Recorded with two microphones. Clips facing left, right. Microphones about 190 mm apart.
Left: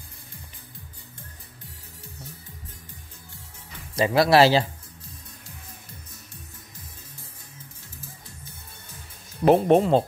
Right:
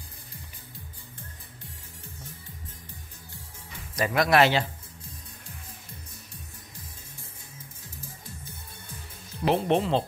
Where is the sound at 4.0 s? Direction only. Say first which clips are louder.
Left 4 dB; 30° left (ahead or behind).